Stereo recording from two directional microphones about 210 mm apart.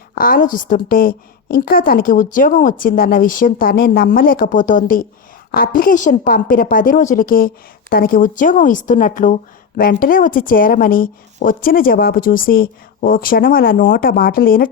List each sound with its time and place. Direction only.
0.1 s a woman's voice: 40° left (ahead or behind)